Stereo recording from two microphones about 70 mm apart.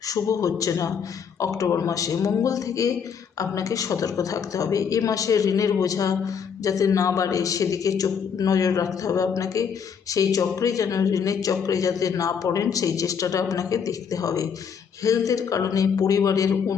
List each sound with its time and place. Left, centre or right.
0.1 s a woman's voice: left